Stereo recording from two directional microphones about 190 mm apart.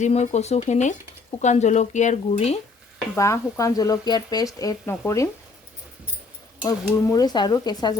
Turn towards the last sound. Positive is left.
turn(degrees=20)  # may be behind; listen again after turning